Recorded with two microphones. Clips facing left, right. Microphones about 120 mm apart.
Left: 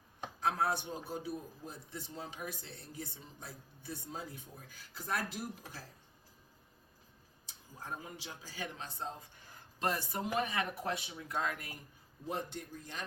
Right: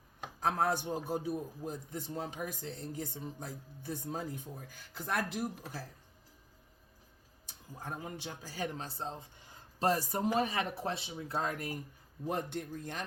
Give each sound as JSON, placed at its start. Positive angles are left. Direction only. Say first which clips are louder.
{"t": 0.3, "sound": "a man's voice", "louder": "right 2 dB", "side_deg": -45}
{"t": 5.0, "sound": "speech", "louder": "right 4 dB", "side_deg": -55}
{"t": 7.4, "sound": "speech", "louder": "right 3 dB", "side_deg": -55}
{"t": 9.9, "sound": "speech", "louder": "right 6 dB", "side_deg": -40}
{"t": 11.3, "sound": "speech", "louder": "right 2 dB", "side_deg": -40}
{"t": 12.2, "sound": "a man's voice", "louder": "right 4 dB", "side_deg": -50}